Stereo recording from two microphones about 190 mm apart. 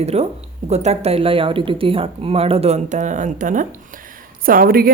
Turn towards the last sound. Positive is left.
turn(degrees=-50)  # may be behind; listen again after turning